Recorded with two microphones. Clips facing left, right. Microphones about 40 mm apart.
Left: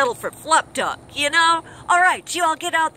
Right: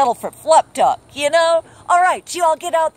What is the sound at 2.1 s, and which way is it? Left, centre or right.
Speech, left.